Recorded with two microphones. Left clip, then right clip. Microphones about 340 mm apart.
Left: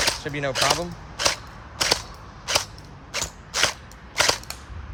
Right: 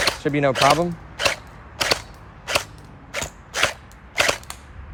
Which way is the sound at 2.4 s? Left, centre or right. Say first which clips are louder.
Right 1 dB; right.